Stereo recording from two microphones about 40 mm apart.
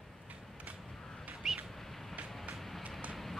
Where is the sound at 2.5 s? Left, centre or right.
Centre.